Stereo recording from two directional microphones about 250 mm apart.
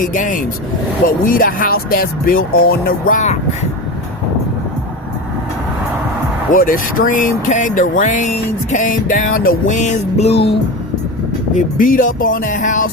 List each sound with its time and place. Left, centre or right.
0.0 s speech: left
6.5 s speech: left